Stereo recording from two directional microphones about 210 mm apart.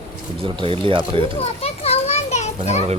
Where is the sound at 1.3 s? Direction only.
30° left (ahead or behind).